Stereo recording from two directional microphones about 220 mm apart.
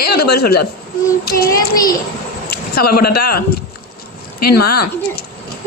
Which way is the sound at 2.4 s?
45° left (ahead or behind).